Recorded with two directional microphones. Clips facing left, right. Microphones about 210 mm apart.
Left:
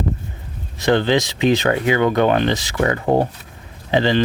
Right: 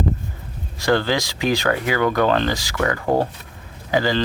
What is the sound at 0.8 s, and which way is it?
Speech, 20° left (ahead or behind).